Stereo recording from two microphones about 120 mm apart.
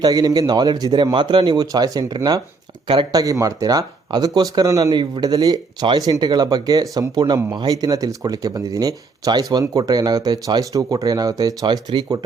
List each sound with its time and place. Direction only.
0.0 s speech: 30° right (ahead or behind)
3.1 s speech: 30° right (ahead or behind)